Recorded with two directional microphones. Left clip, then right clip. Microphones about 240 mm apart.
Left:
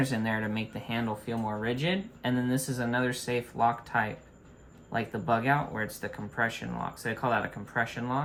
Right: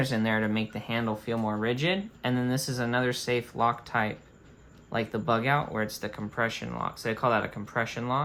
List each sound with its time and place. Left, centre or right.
0.0 s speech: right